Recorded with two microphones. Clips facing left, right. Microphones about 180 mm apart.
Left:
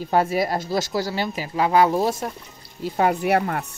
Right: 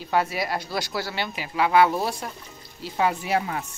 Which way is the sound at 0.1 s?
45° left (ahead or behind).